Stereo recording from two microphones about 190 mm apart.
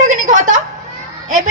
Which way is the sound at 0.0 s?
40° right (ahead or behind).